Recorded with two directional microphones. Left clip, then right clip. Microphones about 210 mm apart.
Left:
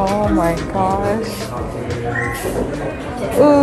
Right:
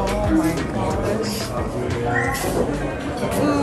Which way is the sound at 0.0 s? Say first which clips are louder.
Left 4 dB; centre (ahead or behind).